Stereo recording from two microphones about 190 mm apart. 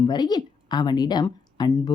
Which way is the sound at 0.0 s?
20° left (ahead or behind).